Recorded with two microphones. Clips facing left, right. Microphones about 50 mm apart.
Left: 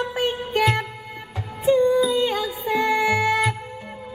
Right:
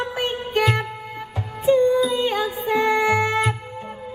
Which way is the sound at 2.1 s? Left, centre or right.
Right.